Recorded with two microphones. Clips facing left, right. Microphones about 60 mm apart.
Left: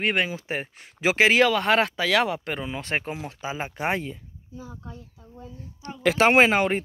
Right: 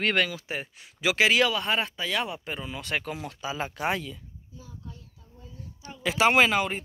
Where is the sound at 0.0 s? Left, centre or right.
Centre.